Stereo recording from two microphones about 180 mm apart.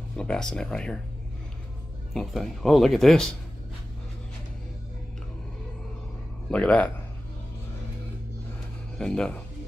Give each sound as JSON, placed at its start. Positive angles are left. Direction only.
{"t": 0.2, "sound": "speech", "side_deg": 5}
{"t": 2.1, "sound": "speech", "side_deg": 0}
{"t": 6.5, "sound": "a man's voice", "side_deg": 5}
{"t": 8.9, "sound": "speech", "side_deg": 5}